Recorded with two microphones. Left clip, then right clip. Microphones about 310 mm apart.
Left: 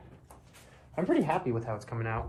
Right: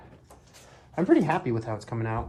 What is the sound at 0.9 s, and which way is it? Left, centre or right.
Speech, right.